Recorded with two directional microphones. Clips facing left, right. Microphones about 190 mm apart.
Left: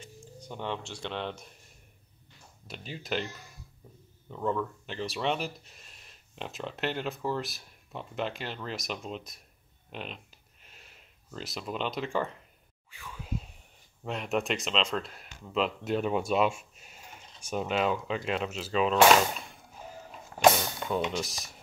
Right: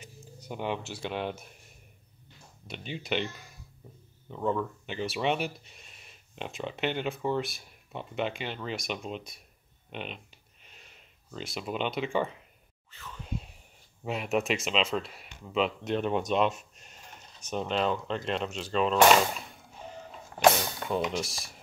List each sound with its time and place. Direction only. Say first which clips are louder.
0.0 s speech: left 2 dB; 10° right (ahead or behind)
2.7 s speech: right 2 dB; centre (ahead or behind)
4.3 s speech: right 1 dB; 5° right (ahead or behind)
9.9 s a sound: right 1 dB; centre (ahead or behind)
12.9 s whispering: left 1 dB; 10° left (ahead or behind)
14.0 s speech: right 2 dB; 5° right (ahead or behind)
19.8 s a sound: right 1 dB; 5° left (ahead or behind)